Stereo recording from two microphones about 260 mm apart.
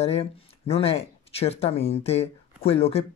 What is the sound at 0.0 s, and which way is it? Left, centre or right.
Speech, left.